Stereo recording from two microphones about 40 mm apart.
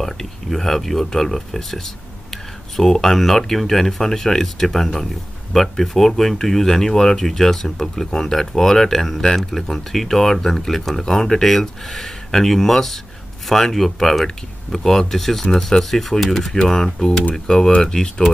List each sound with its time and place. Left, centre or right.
0.0 s speech: centre